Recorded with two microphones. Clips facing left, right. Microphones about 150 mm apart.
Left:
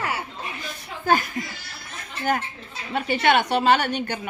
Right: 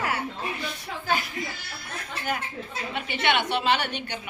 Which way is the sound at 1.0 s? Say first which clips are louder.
Left 7 dB; 45° left (ahead or behind).